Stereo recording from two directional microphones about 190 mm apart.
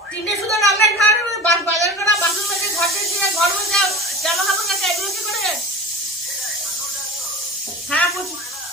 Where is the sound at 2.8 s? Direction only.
Centre (ahead or behind).